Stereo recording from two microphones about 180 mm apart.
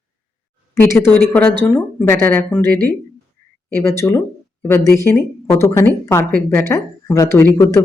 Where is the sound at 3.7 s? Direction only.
15° left (ahead or behind).